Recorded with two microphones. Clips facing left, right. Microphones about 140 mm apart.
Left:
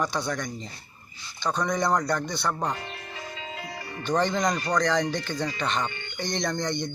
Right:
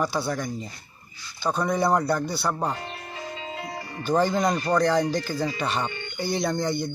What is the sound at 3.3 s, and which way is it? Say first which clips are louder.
Music: right 4 dB; 30° right (ahead or behind).